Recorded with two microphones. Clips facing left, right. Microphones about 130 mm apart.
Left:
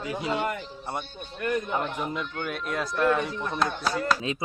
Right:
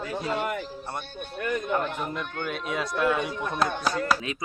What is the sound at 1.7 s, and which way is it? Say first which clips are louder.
Speech: right 1 dB; 15° left (ahead or behind).